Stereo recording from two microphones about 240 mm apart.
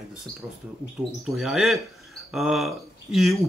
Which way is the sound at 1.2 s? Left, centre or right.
Centre.